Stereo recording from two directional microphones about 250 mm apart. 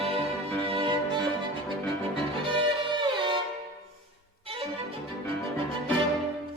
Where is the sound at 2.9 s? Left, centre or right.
Centre.